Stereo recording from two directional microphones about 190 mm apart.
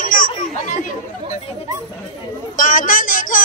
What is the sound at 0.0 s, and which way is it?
Children playing, 45° left (ahead or behind).